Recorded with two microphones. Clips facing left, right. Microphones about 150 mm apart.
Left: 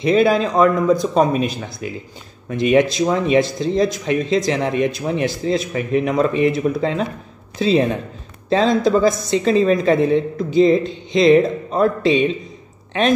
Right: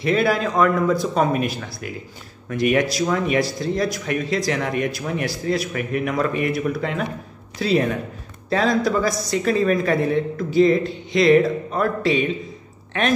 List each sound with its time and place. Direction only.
0.0 s speech: 20° left (ahead or behind)